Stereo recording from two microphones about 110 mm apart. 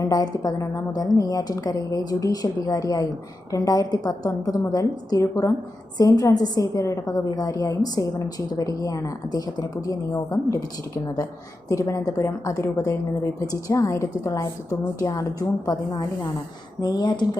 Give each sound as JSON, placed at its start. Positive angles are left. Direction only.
{"t": 0.0, "sound": "a woman's voice", "side_deg": 35}
{"t": 11.7, "sound": "a woman's voice", "side_deg": 25}